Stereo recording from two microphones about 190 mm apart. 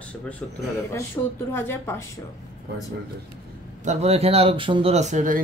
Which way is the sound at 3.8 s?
35° right (ahead or behind).